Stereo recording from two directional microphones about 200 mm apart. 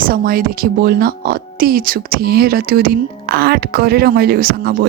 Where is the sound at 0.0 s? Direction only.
45° right (ahead or behind).